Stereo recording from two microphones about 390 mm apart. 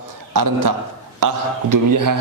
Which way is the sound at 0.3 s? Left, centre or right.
Right.